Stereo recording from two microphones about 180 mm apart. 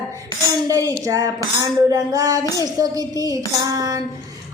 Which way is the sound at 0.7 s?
20° right (ahead or behind).